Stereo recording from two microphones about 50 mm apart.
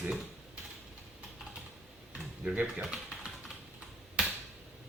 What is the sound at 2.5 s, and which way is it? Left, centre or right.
Speech, right.